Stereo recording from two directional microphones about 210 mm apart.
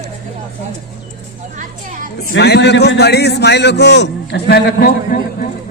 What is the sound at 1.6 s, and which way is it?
Music, 40° right (ahead or behind).